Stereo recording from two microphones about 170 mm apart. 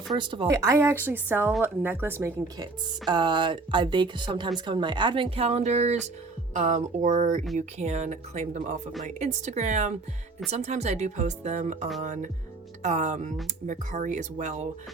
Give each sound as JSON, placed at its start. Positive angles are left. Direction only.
{"t": 0.2, "sound": "speech", "side_deg": -30}
{"t": 0.4, "sound": "speech", "side_deg": -15}
{"t": 3.1, "sound": "speech", "side_deg": -25}